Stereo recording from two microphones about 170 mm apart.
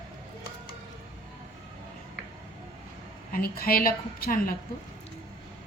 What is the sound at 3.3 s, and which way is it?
Speech, 60° left (ahead or behind).